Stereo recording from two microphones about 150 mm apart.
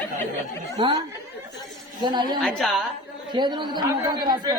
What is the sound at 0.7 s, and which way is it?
Speech, 30° right (ahead or behind).